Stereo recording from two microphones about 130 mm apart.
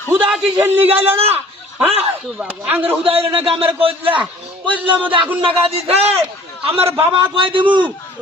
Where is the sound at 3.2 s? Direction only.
45° right (ahead or behind).